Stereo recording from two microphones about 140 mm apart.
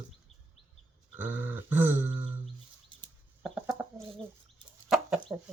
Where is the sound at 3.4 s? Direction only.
10° right (ahead or behind).